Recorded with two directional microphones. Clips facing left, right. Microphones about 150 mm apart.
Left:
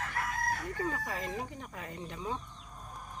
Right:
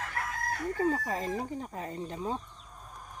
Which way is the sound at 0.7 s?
35° right (ahead or behind).